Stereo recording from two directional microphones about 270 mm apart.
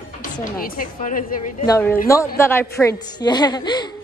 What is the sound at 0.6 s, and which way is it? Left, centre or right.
Speech, left.